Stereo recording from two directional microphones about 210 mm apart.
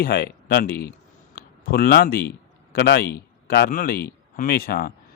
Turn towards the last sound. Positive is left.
turn(degrees=45)  # may be behind; listen again after turning